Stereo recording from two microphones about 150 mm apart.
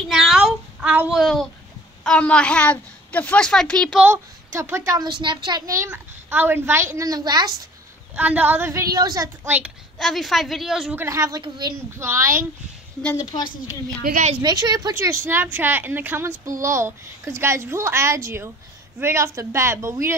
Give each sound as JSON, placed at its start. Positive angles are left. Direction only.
{"t": 0.1, "sound": "a sound", "side_deg": -5}
{"t": 2.0, "sound": "a woman's voice", "side_deg": 5}
{"t": 4.0, "sound": "a woman's voice", "side_deg": -15}
{"t": 5.9, "sound": "a woman's voice", "side_deg": -15}
{"t": 8.2, "sound": "a woman's voice", "side_deg": -10}
{"t": 9.5, "sound": "a woman's voice", "side_deg": -5}
{"t": 11.0, "sound": "a woman's voice", "side_deg": -20}
{"t": 12.0, "sound": "a woman's voice", "side_deg": -15}
{"t": 13.1, "sound": "a woman's voice", "side_deg": 25}
{"t": 14.3, "sound": "a woman's voice", "side_deg": -25}
{"t": 15.2, "sound": "a woman's voice", "side_deg": -15}